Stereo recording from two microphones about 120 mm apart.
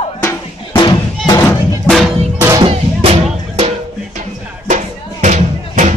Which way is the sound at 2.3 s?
25° right (ahead or behind).